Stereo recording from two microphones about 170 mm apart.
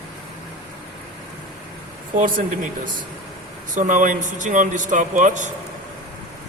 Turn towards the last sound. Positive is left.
turn(degrees=-45)  # may be behind; listen again after turning